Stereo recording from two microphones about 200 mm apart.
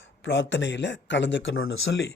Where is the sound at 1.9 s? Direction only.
55° left (ahead or behind).